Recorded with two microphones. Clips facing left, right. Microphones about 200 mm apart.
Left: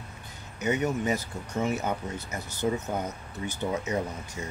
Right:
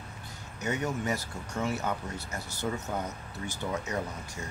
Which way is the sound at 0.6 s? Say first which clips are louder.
Left 5 dB; 20° left (ahead or behind).